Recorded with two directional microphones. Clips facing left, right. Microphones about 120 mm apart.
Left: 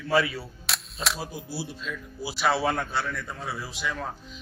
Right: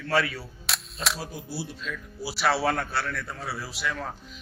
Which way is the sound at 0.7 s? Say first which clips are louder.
Even; centre (ahead or behind).